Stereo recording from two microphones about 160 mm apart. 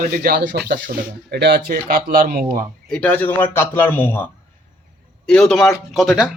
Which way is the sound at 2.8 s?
5° left (ahead or behind).